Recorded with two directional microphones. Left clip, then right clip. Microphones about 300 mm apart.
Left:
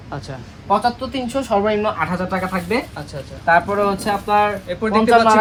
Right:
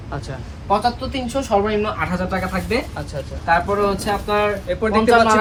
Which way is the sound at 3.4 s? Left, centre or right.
Centre.